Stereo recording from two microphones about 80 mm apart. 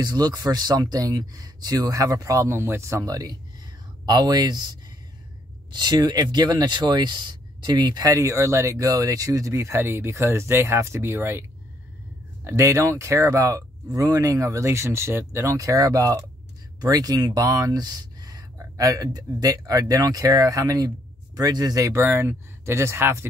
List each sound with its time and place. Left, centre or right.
0.0 s speech: right
4.1 s speech: right
8.1 s speech: right
12.4 s speech: right
15.5 s speech: right